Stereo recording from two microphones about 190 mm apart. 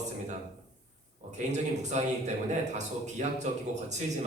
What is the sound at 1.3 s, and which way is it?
A man's voice, 40° right (ahead or behind).